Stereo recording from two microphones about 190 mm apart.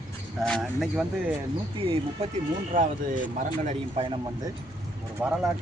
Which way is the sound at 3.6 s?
30° right (ahead or behind).